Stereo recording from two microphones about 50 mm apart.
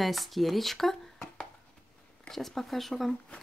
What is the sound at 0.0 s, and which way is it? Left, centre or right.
Speech, centre.